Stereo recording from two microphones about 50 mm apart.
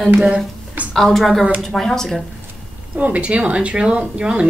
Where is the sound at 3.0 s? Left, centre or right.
Right.